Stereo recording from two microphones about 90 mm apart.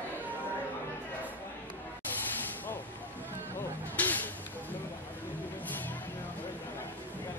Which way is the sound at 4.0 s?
20° left (ahead or behind).